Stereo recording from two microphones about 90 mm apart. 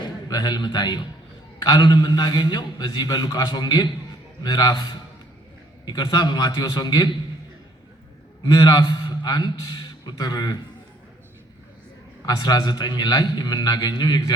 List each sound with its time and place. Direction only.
0.3 s a man's voice: 50° left (ahead or behind)
8.4 s a man's voice: 50° left (ahead or behind)
12.2 s a man's voice: 45° left (ahead or behind)